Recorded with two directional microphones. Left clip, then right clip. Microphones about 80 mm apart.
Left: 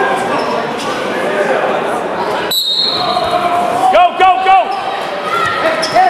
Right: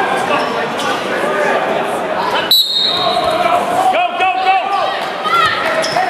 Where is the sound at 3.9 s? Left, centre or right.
Left.